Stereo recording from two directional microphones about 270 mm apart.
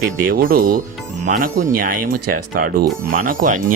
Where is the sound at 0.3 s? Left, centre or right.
Right.